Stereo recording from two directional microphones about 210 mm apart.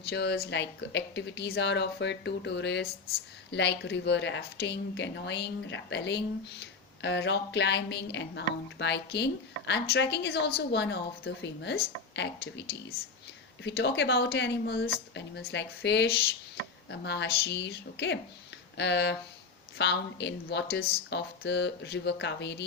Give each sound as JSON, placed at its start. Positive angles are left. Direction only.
{"t": 0.1, "sound": "speech", "side_deg": 50}